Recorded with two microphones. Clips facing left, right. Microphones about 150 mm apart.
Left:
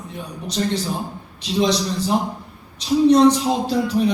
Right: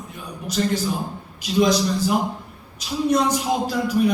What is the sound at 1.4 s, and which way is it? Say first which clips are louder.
Speech: right 1 dB; 30° left (ahead or behind).